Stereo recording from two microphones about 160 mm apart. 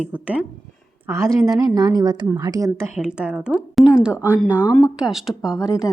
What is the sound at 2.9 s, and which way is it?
A woman's voice, 5° right (ahead or behind).